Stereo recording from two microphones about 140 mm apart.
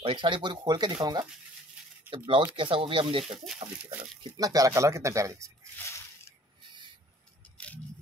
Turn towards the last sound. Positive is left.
turn(degrees=10)  # may be behind; listen again after turning